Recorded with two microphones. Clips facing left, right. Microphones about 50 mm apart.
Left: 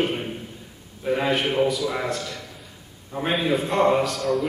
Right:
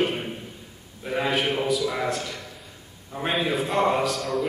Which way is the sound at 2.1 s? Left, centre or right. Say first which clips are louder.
Even; centre.